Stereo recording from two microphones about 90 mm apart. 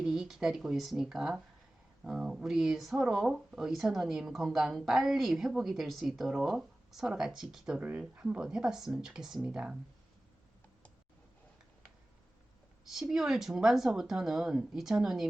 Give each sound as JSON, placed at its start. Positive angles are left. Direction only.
{"t": 0.0, "sound": "speech", "side_deg": -5}
{"t": 7.9, "sound": "speech", "side_deg": -20}
{"t": 8.2, "sound": "speech", "side_deg": -10}
{"t": 12.8, "sound": "speech", "side_deg": -5}